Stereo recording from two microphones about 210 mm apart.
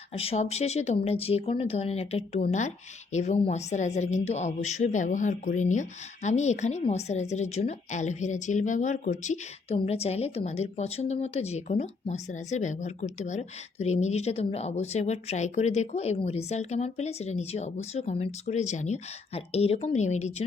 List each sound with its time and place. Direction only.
0.1 s speech: 30° left (ahead or behind)